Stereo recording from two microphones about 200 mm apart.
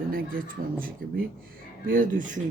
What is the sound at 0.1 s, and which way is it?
Speech, 45° right (ahead or behind).